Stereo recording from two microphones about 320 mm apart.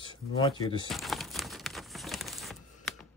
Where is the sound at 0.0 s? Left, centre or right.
Centre.